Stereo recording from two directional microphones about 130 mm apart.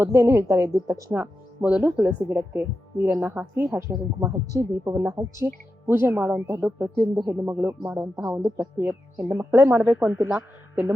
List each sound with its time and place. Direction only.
0.0 s a woman's voice: 20° right (ahead or behind)